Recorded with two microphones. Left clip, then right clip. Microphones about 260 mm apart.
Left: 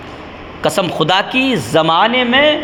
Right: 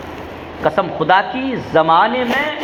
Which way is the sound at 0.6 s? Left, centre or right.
Left.